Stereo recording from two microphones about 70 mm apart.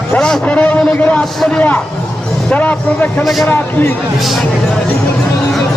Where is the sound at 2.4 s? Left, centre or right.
Left.